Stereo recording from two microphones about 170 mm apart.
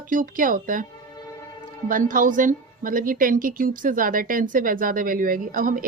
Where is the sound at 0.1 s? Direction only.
55° right (ahead or behind).